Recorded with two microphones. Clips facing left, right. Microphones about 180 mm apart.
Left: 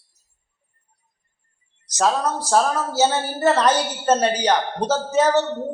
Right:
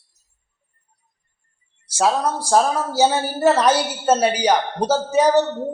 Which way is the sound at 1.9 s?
10° right (ahead or behind).